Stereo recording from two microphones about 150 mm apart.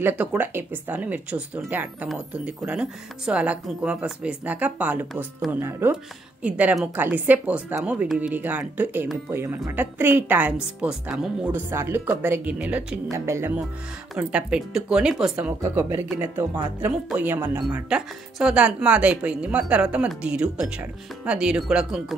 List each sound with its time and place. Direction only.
0.0 s speech: 10° right (ahead or behind)
14.1 s speech: 5° right (ahead or behind)
15.6 s speech: 15° right (ahead or behind)